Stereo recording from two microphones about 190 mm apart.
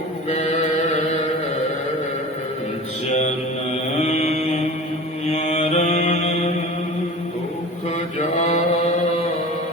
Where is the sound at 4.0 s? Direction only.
35° left (ahead or behind).